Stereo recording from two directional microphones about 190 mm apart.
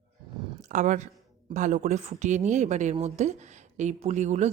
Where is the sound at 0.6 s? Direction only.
40° right (ahead or behind).